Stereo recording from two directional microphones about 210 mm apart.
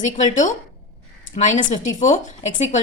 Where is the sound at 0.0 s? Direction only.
35° left (ahead or behind).